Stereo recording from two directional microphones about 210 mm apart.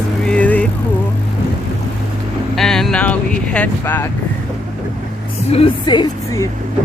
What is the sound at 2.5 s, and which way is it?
Vehicle, centre (ahead or behind).